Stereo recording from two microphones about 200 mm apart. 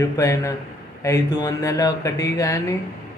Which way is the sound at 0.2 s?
15° left (ahead or behind).